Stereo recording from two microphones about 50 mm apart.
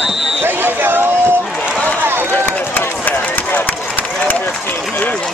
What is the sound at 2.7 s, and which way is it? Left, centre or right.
Run, left.